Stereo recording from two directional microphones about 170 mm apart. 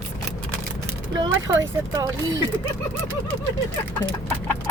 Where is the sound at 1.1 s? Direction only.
25° right (ahead or behind).